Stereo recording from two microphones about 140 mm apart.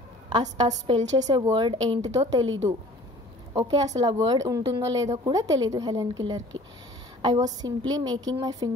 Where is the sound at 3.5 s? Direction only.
30° right (ahead or behind).